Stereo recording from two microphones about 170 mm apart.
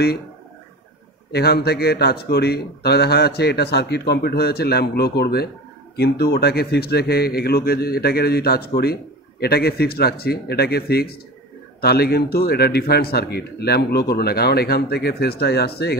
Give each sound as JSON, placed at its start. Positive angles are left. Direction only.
{"t": 1.3, "sound": "a man's voice", "side_deg": 70}